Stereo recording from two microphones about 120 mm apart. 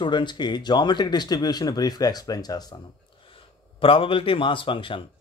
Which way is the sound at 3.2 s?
50° left (ahead or behind).